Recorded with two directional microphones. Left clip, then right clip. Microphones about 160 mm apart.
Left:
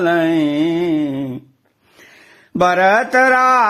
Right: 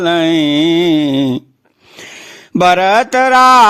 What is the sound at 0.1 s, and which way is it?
Speech, 35° right (ahead or behind).